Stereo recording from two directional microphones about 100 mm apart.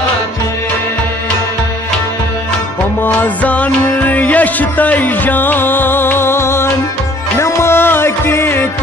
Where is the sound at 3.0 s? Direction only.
15° left (ahead or behind).